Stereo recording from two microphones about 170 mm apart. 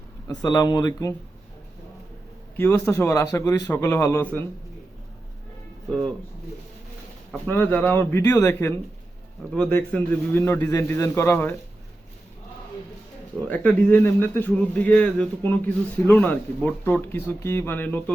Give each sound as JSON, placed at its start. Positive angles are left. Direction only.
{"t": 0.3, "sound": "speech", "side_deg": 20}
{"t": 2.6, "sound": "a man's voice", "side_deg": 15}
{"t": 7.3, "sound": "a man's voice", "side_deg": 10}
{"t": 13.5, "sound": "a man's voice", "side_deg": 10}